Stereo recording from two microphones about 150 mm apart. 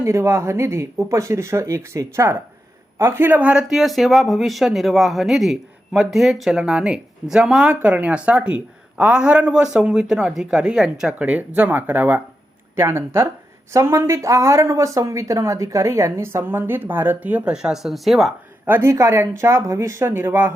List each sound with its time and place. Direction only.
0.0 s speech: 20° right (ahead or behind); by 18.3 s centre (ahead or behind)
18.6 s speech: 15° right (ahead or behind)